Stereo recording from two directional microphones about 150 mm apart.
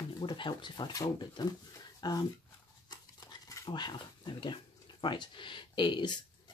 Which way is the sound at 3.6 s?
30° left (ahead or behind).